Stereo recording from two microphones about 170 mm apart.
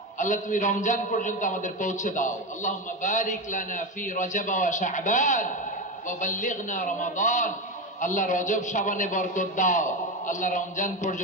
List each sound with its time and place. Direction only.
0.2 s a man's voice: 45° left (ahead or behind)